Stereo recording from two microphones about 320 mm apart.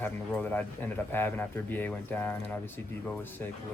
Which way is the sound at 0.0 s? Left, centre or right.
Centre.